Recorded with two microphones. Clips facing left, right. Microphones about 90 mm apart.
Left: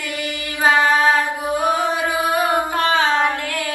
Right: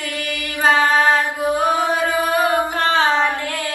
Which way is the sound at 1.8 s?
20° left (ahead or behind).